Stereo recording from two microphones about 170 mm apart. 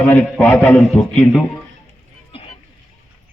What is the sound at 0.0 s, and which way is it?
A man's voice, 10° left (ahead or behind).